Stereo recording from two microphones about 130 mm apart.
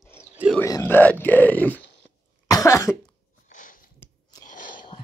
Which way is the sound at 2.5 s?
25° left (ahead or behind).